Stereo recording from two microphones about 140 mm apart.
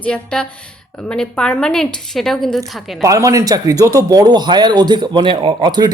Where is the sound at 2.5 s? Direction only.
25° right (ahead or behind).